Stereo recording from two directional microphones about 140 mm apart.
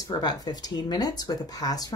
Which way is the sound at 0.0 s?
30° left (ahead or behind).